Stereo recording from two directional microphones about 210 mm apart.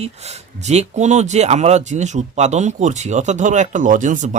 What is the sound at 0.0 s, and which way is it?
A man's voice, 30° right (ahead or behind).